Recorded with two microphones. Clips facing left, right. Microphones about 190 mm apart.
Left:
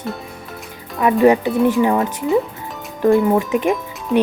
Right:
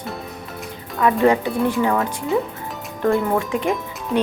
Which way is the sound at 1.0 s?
20° left (ahead or behind).